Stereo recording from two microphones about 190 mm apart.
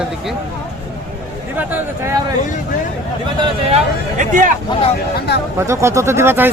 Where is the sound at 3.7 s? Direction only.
40° right (ahead or behind).